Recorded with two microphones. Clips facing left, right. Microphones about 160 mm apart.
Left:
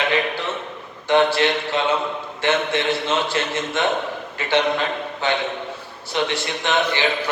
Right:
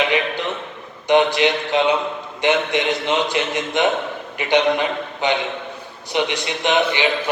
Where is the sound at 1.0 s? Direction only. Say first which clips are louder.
Right 2 dB; 15° right (ahead or behind).